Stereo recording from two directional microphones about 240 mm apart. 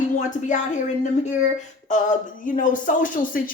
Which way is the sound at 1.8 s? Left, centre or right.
Left.